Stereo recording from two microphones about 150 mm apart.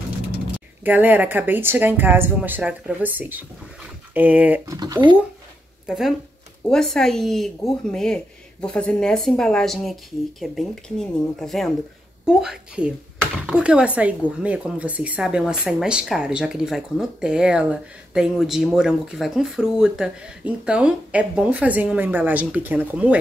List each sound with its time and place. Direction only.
0.8 s speech: 10° right (ahead or behind)
4.6 s speech: 25° right (ahead or behind)
5.9 s speech: centre (ahead or behind)